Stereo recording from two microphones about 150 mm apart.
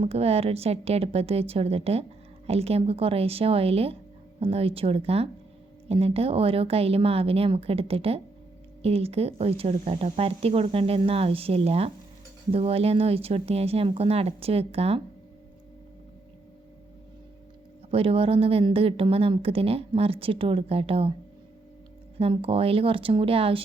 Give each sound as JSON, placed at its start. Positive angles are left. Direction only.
{"t": 0.0, "sound": "speech", "side_deg": -40}
{"t": 17.9, "sound": "speech", "side_deg": -40}
{"t": 22.2, "sound": "speech", "side_deg": -40}